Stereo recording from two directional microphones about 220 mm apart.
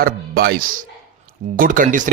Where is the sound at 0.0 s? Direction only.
45° right (ahead or behind).